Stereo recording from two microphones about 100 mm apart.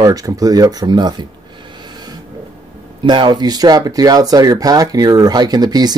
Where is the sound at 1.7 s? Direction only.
45° right (ahead or behind).